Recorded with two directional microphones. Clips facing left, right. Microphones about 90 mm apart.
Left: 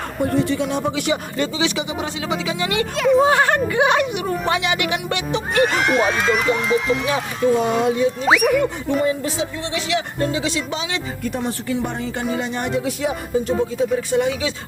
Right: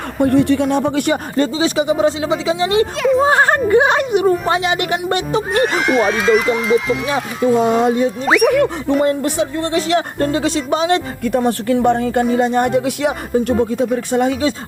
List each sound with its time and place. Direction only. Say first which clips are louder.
0.2 s speech: right 7 dB; 60° right (ahead or behind); by 2.8 s 30° right (ahead or behind)
2.9 s speech: right 1 dB; centre (ahead or behind)
3.2 s speech: right 3 dB; 35° right (ahead or behind)
5.6 s speech: right 3 dB; centre (ahead or behind)
7.6 s speech: right 4 dB; 40° right (ahead or behind)
8.2 s speech: right 4 dB; centre (ahead or behind)
9.0 s speech: right 5 dB; 65° right (ahead or behind); by 14.5 s 45° right (ahead or behind)